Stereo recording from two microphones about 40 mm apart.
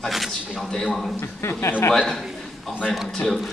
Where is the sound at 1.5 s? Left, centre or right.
Left.